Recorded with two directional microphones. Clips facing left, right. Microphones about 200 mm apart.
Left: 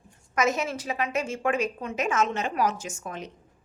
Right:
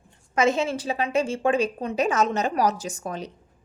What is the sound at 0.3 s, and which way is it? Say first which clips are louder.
A woman's voice: right 4 dB; 30° right (ahead or behind).